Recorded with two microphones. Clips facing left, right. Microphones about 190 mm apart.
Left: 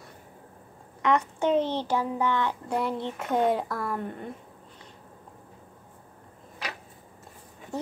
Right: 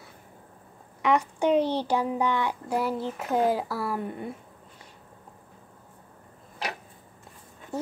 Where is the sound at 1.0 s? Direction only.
10° right (ahead or behind).